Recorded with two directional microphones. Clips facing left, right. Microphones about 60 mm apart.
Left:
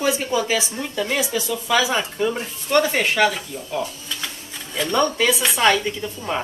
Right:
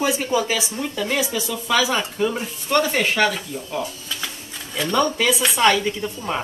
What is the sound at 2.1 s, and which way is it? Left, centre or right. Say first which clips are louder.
Speech: even; centre.